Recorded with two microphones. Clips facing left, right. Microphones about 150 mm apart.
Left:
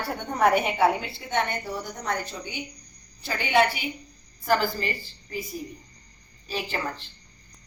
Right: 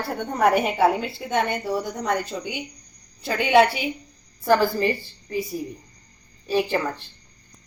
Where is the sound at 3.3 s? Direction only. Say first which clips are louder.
Right 5 dB; 90° right.